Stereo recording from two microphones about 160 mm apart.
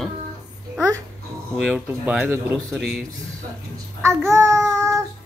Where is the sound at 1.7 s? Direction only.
5° right (ahead or behind).